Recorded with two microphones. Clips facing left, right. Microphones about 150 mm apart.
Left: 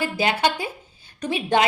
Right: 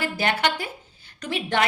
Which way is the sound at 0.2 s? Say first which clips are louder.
Left 2 dB; 20° left (ahead or behind).